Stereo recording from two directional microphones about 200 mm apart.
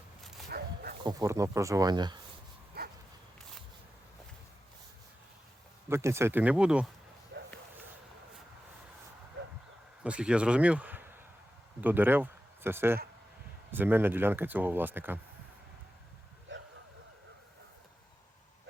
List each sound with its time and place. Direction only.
0.5 s bow-wow: 50° right (ahead or behind)
1.0 s speech: 15° right (ahead or behind)
5.9 s speech: 15° right (ahead or behind)
7.3 s a sound: 55° right (ahead or behind)
10.0 s a man's voice: 5° right (ahead or behind)
16.5 s a sound: 65° right (ahead or behind)